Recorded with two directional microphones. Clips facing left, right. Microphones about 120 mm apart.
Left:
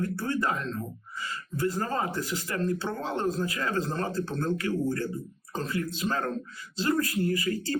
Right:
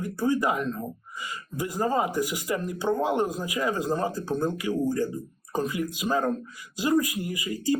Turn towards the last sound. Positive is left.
turn(degrees=-15)  # may be behind; listen again after turning